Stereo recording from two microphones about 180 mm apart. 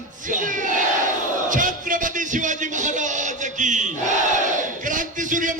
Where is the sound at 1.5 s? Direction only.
45° right (ahead or behind).